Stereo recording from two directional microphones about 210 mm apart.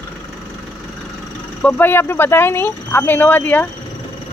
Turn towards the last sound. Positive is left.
turn(degrees=10)  # may be behind; listen again after turning